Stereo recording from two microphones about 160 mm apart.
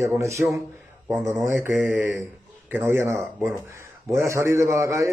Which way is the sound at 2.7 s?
15° right (ahead or behind).